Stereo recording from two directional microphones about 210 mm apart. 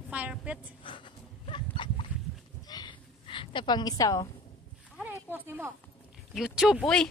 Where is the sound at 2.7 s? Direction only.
20° left (ahead or behind).